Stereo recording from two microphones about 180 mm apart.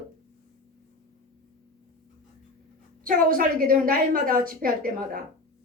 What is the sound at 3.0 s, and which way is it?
A woman's voice, 50° right (ahead or behind).